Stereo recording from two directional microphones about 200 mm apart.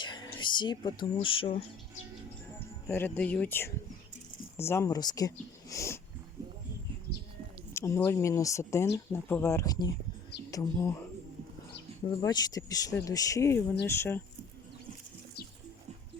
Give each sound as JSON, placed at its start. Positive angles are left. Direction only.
{"t": 0.0, "sound": "a sound", "side_deg": 20}
{"t": 1.1, "sound": "speech", "side_deg": 25}
{"t": 2.8, "sound": "speech", "side_deg": 10}
{"t": 7.7, "sound": "speech", "side_deg": 15}
{"t": 12.0, "sound": "speech", "side_deg": 20}